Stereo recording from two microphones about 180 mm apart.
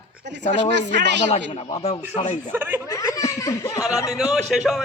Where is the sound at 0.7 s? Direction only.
75° right (ahead or behind).